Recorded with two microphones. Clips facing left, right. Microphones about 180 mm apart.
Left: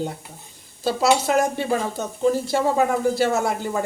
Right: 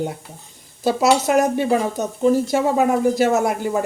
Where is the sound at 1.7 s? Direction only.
15° right (ahead or behind).